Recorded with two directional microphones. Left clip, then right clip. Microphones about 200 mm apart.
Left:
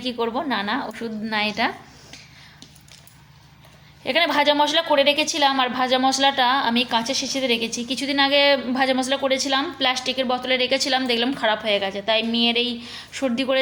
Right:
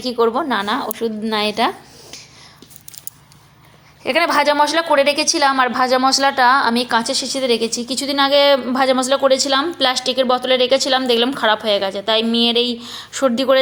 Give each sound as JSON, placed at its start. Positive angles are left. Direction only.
{"t": 0.0, "sound": "a woman's voice", "side_deg": -20}
{"t": 4.0, "sound": "a woman's voice", "side_deg": -20}